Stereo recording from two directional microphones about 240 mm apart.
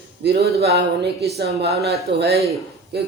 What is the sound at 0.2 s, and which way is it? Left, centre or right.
A man's voice, right.